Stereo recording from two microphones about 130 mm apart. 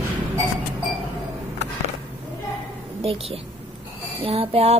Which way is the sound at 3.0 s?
50° right (ahead or behind).